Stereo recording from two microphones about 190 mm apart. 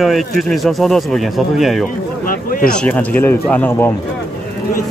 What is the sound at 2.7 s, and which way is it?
Speech, 5° left (ahead or behind).